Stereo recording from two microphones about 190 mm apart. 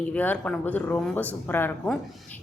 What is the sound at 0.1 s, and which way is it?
A woman's voice, 10° left (ahead or behind).